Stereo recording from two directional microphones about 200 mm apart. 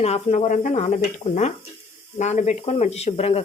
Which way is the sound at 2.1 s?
35° left (ahead or behind).